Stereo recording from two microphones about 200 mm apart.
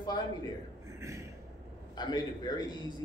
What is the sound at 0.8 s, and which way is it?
Speech, 15° right (ahead or behind).